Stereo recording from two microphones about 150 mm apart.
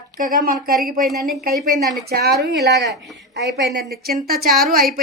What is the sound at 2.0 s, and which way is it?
Speech, 90° right.